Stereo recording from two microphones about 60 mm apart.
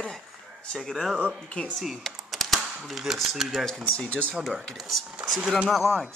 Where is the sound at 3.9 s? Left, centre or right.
Left.